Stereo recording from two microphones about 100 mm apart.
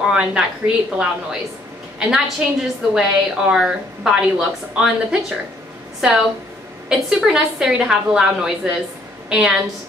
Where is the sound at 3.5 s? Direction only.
5° right (ahead or behind).